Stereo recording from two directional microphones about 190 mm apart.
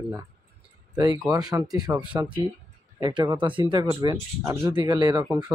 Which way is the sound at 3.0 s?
25° right (ahead or behind).